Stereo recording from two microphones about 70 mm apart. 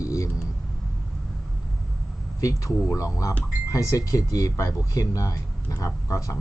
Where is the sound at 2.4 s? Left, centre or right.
Left.